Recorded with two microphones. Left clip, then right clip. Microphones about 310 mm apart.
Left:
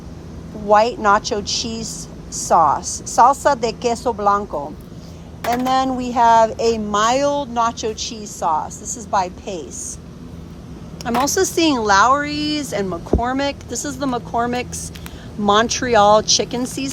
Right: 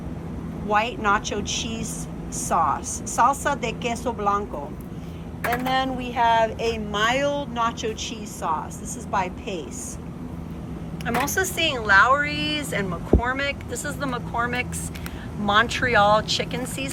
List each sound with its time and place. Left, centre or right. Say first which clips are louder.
0.7 s speech: left 8 dB; centre
5.5 s speech: left 6 dB; centre
6.4 s speech: left 7 dB; left
6.9 s speech: left 4 dB; centre
11.0 s speech: left 6 dB; centre